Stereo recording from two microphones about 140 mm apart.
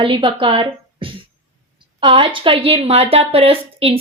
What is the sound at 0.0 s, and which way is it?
Speech, 40° right (ahead or behind).